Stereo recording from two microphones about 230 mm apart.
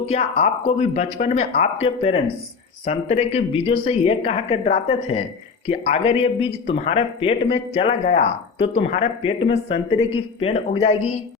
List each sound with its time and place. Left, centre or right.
0.1 s speech: left